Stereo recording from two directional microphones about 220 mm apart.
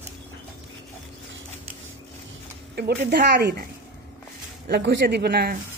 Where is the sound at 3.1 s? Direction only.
50° right (ahead or behind).